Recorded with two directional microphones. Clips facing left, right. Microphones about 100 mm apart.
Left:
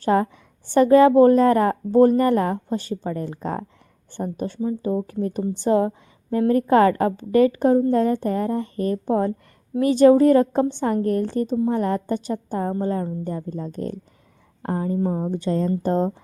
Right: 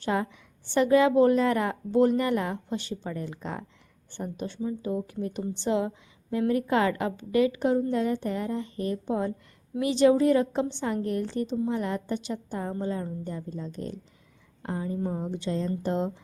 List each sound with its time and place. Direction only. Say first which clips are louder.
0.0 s a woman's voice: left 8 dB; 45° left (ahead or behind)